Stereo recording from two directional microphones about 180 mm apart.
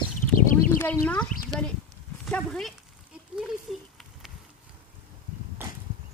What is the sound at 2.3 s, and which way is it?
Speech, 5° left (ahead or behind).